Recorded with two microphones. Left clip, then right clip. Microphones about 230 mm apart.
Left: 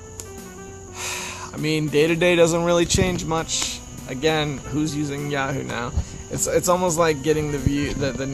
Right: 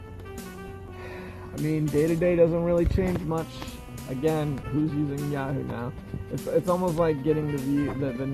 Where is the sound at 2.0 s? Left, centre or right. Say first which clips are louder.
Left 5 dB; left.